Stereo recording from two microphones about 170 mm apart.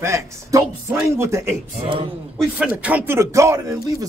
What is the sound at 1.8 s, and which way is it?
Speech, 30° right (ahead or behind).